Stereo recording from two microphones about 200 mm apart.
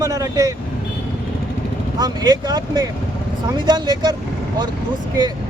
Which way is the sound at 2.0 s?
20° right (ahead or behind).